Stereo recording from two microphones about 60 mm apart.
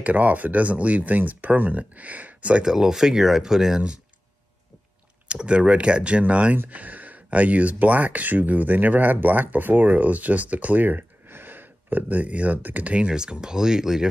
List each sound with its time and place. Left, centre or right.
0.0 s speech: right
2.7 s speech: centre
5.3 s speech: centre